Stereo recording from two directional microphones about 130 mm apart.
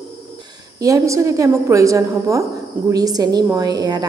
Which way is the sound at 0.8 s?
25° right (ahead or behind).